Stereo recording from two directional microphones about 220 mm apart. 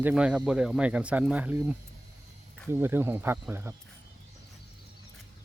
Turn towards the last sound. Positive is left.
turn(degrees=-10)  # may be behind; listen again after turning